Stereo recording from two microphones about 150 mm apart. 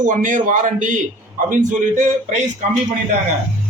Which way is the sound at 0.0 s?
60° right (ahead or behind).